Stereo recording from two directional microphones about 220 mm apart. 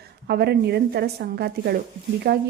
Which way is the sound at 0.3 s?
45° right (ahead or behind).